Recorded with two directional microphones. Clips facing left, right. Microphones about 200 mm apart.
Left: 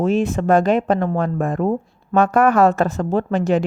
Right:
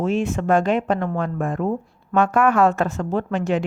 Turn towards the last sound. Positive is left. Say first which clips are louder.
# left 4 dB
turn(degrees=35)  # may be behind; listen again after turning